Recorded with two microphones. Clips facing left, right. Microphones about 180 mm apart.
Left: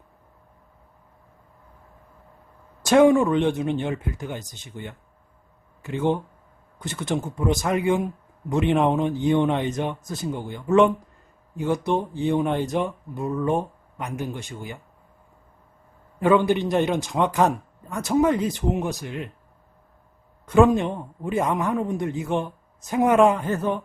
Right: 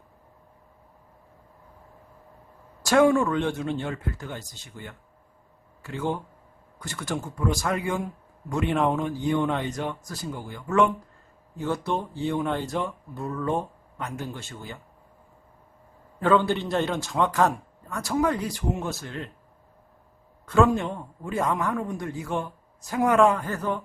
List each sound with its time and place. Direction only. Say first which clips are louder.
2.8 s a man's voice: left 4 dB; 20° left (ahead or behind)
16.2 s speech: left 3 dB; 15° left (ahead or behind)
20.4 s a man's voice: left 4 dB; 20° left (ahead or behind)